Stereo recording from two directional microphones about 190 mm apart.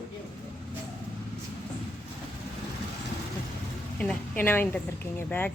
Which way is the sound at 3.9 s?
5° left (ahead or behind).